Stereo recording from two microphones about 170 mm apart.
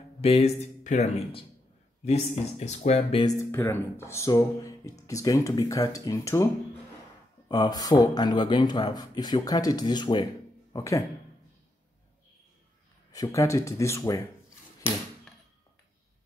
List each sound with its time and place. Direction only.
0.2 s speech: 35° left (ahead or behind)
3.2 s speech: 20° left (ahead or behind)
13.1 s speech: 20° left (ahead or behind)